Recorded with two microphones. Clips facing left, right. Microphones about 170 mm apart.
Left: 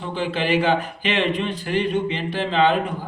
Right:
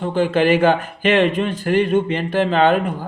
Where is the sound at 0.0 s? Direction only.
45° right (ahead or behind).